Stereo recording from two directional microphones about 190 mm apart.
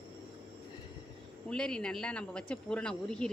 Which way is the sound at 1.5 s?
5° left (ahead or behind).